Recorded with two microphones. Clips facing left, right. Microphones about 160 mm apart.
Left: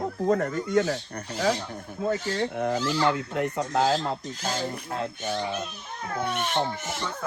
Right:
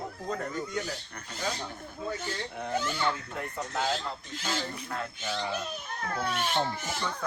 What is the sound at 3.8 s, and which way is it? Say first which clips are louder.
Speech: left 8 dB; 40° left (ahead or behind).